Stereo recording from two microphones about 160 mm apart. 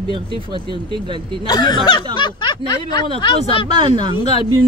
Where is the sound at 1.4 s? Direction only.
25° left (ahead or behind).